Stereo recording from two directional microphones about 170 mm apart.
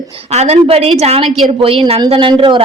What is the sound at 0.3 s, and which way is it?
A woman's voice, 40° right (ahead or behind).